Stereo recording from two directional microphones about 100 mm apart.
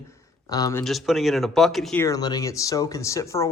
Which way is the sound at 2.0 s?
40° left (ahead or behind).